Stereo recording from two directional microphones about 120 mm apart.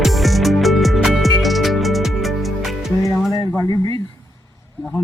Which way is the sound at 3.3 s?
30° left (ahead or behind).